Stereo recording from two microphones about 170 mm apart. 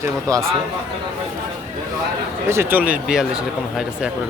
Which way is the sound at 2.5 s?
10° right (ahead or behind).